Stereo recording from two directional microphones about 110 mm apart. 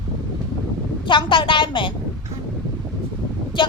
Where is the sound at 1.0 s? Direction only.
50° left (ahead or behind).